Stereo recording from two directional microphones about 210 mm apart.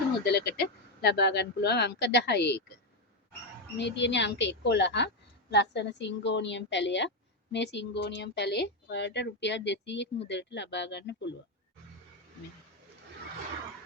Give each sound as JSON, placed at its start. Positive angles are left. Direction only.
{"t": 0.3, "sound": "speech", "side_deg": 50}
{"t": 3.8, "sound": "speech", "side_deg": 55}